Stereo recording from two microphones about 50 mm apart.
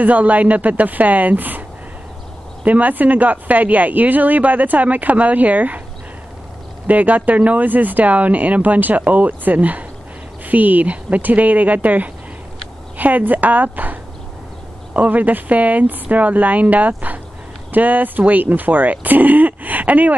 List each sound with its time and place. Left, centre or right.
0.0 s speech: right
2.6 s speech: right
6.9 s speech: right
15.0 s speech: right